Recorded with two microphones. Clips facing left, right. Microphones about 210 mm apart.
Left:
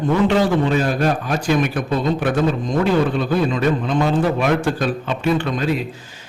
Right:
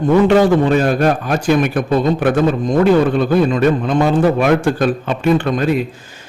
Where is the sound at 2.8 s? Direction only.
50° right (ahead or behind).